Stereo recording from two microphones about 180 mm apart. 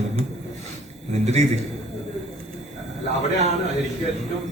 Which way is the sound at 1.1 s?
35° right (ahead or behind).